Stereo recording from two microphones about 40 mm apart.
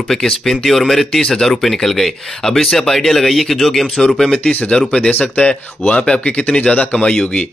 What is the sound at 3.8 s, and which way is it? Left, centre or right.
Speech, centre.